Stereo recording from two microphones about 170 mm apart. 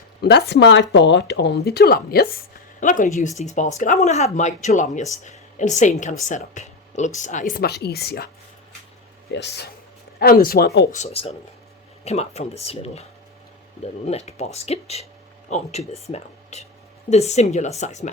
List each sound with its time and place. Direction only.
0.2 s speech: 85° left; by 2.4 s 65° left (ahead or behind)
2.8 s a woman's voice: 50° left (ahead or behind); by 8.3 s 70° left (ahead or behind)
9.3 s speech: 85° left
10.2 s speech: 60° left (ahead or behind)
10.9 s speech: 40° left (ahead or behind)
14.1 s a woman's voice: 40° left (ahead or behind)